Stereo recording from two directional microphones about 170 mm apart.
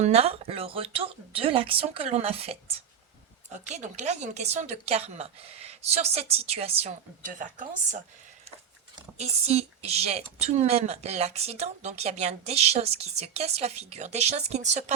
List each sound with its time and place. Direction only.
0.0 s a woman's voice: 35° right (ahead or behind)
9.1 s a woman's voice: 40° right (ahead or behind)